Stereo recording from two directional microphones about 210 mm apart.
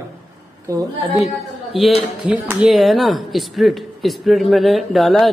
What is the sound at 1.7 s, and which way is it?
Speech, centre (ahead or behind).